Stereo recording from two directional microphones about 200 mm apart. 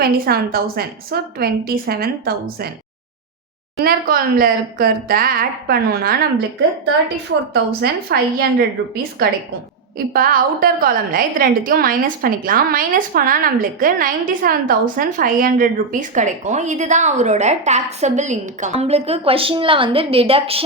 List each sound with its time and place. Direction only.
0.0 s a woman's voice: 50° right (ahead or behind)
3.8 s a woman's voice: 50° right (ahead or behind)
7.5 s a woman's voice: 55° right (ahead or behind); by 20.7 s 30° right (ahead or behind)